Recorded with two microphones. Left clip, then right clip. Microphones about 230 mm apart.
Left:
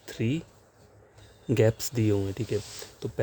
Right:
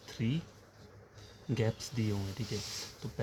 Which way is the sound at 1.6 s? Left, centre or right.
Left.